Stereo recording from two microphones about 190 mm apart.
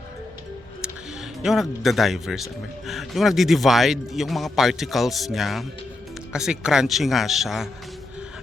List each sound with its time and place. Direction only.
1.4 s speech: centre (ahead or behind)